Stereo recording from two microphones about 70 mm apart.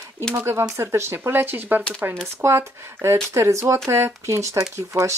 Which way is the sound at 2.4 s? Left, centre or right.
Right.